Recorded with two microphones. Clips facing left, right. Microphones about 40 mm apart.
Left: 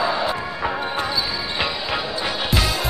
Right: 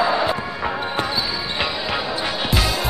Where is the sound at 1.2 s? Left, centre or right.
Centre.